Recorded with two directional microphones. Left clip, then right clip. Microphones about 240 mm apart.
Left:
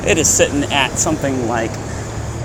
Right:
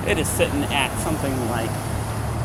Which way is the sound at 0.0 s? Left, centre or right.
Left.